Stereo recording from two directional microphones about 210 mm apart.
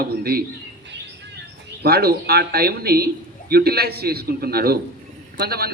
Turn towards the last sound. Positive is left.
turn(degrees=-45)  # may be behind; listen again after turning